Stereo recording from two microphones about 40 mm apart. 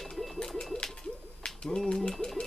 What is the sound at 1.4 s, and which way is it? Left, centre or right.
Bird, centre.